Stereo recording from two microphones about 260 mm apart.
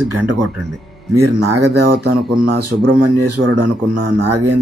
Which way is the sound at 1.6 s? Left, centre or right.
Right.